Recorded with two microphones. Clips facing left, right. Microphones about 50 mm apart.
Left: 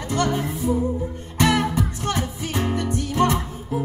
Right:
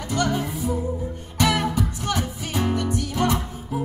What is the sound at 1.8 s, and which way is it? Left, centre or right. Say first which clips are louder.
Music: left 1 dB; left.